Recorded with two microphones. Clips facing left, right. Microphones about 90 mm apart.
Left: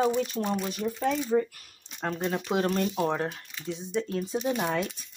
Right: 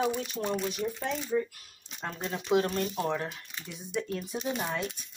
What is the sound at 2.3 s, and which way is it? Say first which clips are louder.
Speech: right 2 dB; 40° left (ahead or behind).